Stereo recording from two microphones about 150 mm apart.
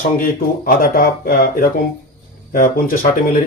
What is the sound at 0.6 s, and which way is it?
Speech, 75° left (ahead or behind).